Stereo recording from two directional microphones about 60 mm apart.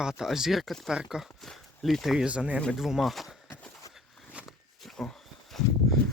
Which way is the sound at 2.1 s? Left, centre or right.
Centre.